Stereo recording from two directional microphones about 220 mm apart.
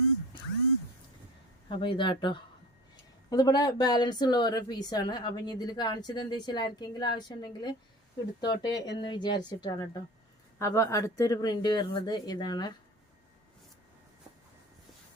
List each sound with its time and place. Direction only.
1.7 s speech: 20° left (ahead or behind)